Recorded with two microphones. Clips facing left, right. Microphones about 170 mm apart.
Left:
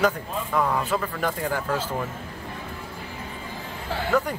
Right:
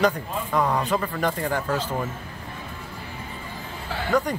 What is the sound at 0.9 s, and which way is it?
Speech, 5° left (ahead or behind).